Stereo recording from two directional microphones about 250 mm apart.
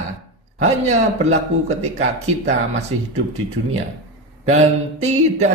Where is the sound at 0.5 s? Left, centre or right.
Right.